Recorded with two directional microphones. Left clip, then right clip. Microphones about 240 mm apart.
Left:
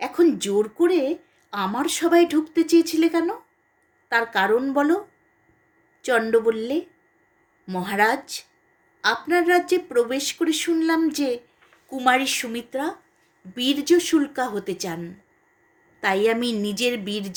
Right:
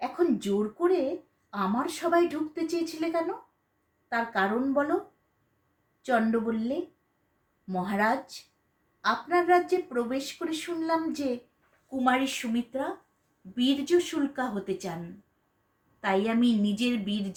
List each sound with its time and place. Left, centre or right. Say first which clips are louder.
0.0 s a sound: left 7 dB; left
1.5 s speech: left 5 dB; left
6.0 s speech: left 5 dB; left
7.7 s a woman's voice: left 6 dB; left
16.0 s a woman's voice: left 6 dB; left